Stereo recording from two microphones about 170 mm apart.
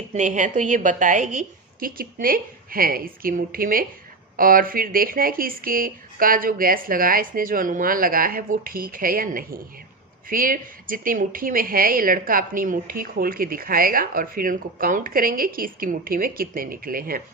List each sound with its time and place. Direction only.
0.1 s a woman's voice: 45° right (ahead or behind)